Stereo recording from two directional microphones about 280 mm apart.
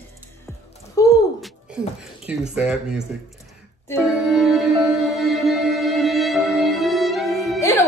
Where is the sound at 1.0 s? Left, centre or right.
Centre.